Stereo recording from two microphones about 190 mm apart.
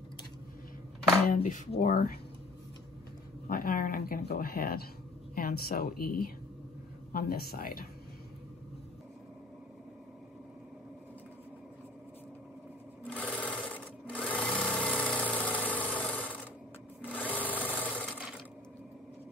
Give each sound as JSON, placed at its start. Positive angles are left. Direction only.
{"t": 1.3, "sound": "speech", "side_deg": 40}
{"t": 3.4, "sound": "speech", "side_deg": 50}
{"t": 13.0, "sound": "sewing machine", "side_deg": 5}